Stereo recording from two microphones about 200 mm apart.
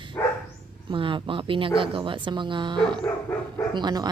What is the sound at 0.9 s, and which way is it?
Speech, 25° right (ahead or behind).